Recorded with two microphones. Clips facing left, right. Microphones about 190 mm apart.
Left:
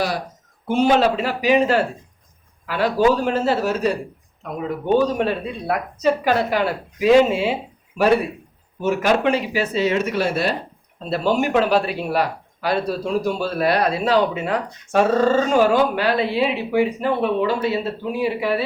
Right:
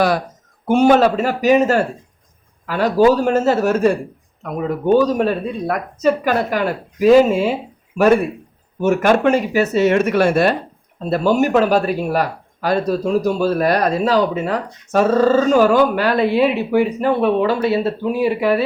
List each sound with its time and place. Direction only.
0.7 s a man's voice: 45° right (ahead or behind)
17.4 s a man's voice: 65° right (ahead or behind); by 18.6 s 45° right (ahead or behind)